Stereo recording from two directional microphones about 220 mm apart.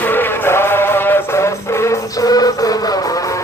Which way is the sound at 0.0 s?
10° left (ahead or behind).